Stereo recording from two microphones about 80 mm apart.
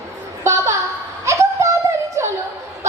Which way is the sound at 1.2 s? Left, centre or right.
Right.